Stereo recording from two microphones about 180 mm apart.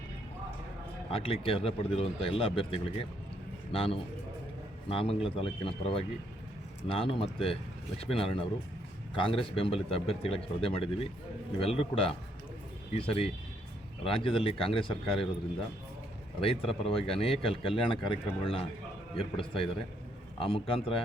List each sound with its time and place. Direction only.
1.1 s a man's voice: 30° left (ahead or behind)
16.4 s speech: 30° left (ahead or behind)